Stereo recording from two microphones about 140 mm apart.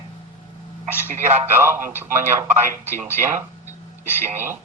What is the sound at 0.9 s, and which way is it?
Speech, 15° left (ahead or behind).